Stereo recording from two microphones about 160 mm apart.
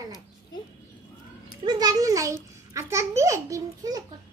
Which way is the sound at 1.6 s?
25° right (ahead or behind).